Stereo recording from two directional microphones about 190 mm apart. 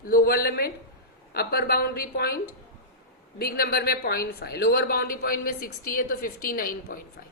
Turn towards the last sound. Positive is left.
turn(degrees=50)  # may be behind; listen again after turning